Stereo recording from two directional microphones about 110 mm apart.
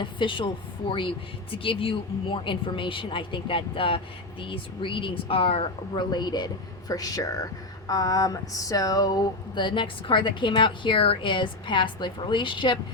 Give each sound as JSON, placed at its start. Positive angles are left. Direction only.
{"t": 0.0, "sound": "speech", "side_deg": 50}
{"t": 5.9, "sound": "speech", "side_deg": 40}